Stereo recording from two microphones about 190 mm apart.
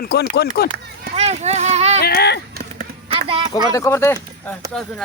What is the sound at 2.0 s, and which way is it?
Speech, 55° left (ahead or behind).